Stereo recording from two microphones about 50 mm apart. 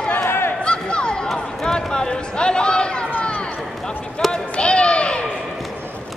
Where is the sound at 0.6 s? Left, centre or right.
Centre.